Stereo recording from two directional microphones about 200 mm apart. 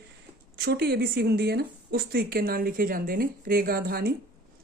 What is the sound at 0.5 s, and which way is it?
Speech, 55° right (ahead or behind).